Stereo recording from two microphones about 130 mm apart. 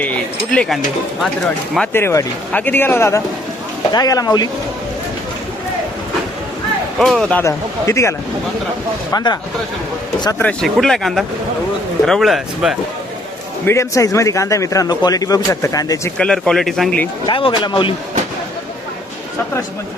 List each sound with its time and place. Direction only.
0.5 s speech: 5° left (ahead or behind)
1.9 s speech: 20° left (ahead or behind)
3.9 s speech: 30° left (ahead or behind)
7.0 s speech: 5° left (ahead or behind)
7.4 s a man's voice: 20° left (ahead or behind)
9.1 s a man's voice: 30° left (ahead or behind)
10.3 s speech: 5° left (ahead or behind)
13.7 s a man's voice: 25° left (ahead or behind)
16.1 s speech: 5° left (ahead or behind)
17.2 s speech: 40° left (ahead or behind)